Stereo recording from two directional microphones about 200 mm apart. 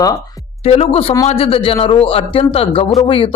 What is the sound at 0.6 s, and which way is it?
A man's voice, 30° left (ahead or behind).